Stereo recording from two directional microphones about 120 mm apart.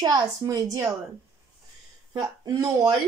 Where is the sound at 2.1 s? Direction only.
30° right (ahead or behind).